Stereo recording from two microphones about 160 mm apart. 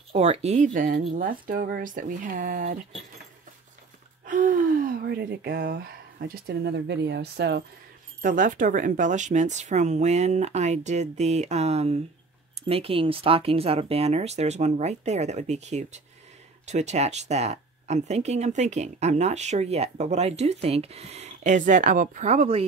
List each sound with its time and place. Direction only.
0.1 s speech: 40° right (ahead or behind)
0.9 s speech: 60° right (ahead or behind)
4.3 s speech: 55° right (ahead or behind)
5.0 s speech: 90° right
8.2 s speech: 55° right (ahead or behind)